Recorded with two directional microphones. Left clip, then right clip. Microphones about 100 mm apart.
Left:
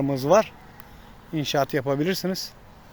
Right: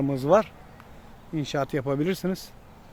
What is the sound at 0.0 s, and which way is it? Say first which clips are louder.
Speech: left 2 dB; 10° right (ahead or behind).